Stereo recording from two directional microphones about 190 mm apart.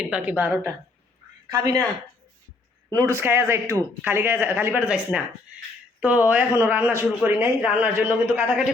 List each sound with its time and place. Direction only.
0.1 s a man's voice: 10° right (ahead or behind)
2.9 s a man's voice: 15° right (ahead or behind)